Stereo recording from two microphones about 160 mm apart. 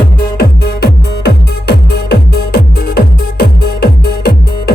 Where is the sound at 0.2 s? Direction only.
75° left (ahead or behind).